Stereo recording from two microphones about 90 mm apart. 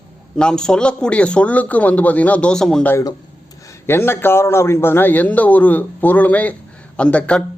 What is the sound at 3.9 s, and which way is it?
A man's voice, 25° left (ahead or behind).